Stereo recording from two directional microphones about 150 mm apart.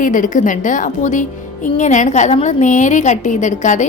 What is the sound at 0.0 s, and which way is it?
A woman's voice, 60° left (ahead or behind).